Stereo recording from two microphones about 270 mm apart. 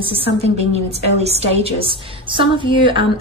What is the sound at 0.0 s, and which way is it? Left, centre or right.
A woman's voice, centre.